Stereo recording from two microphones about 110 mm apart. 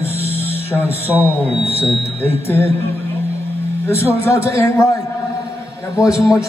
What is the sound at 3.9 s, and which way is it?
A man's voice, 25° left (ahead or behind).